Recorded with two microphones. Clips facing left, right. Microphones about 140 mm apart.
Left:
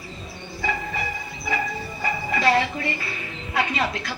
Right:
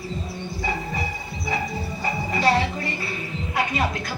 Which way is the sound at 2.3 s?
35° right (ahead or behind).